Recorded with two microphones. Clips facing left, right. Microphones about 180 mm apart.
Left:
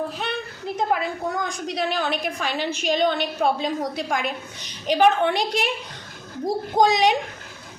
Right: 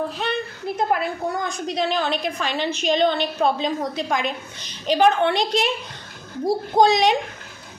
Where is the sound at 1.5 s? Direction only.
15° left (ahead or behind).